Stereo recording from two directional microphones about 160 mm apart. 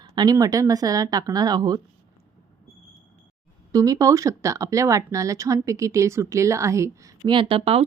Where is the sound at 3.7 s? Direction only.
20° right (ahead or behind).